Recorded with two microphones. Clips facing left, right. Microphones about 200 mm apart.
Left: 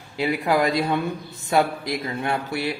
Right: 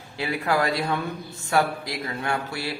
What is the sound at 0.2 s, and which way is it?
Speech, 15° left (ahead or behind).